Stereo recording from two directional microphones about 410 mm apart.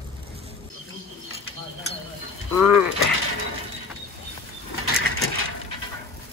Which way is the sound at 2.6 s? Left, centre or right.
Left.